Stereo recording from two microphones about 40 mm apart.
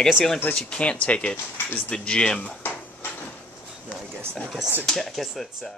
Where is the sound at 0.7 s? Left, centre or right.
Left.